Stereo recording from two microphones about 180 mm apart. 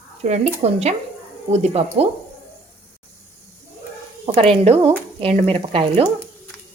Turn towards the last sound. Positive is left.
turn(degrees=-30)  # may be behind; listen again after turning